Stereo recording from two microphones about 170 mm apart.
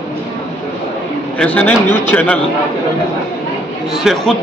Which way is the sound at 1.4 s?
10° left (ahead or behind).